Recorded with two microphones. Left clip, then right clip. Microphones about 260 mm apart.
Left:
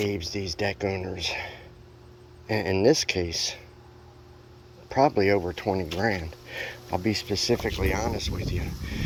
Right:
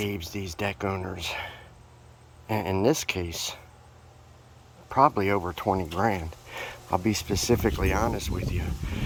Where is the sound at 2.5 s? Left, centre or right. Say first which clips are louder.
Left 2 dB; right.